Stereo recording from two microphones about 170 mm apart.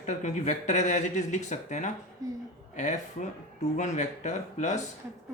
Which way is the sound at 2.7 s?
45° left (ahead or behind).